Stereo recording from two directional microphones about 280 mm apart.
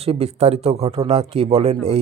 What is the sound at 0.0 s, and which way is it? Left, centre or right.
Speech, right.